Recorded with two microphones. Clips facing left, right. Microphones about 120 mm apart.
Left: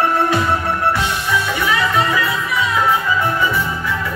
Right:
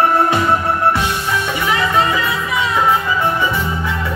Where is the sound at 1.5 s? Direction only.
20° right (ahead or behind).